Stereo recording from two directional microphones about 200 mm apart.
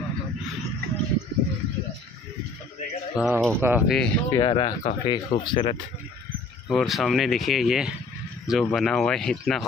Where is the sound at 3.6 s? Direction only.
10° right (ahead or behind).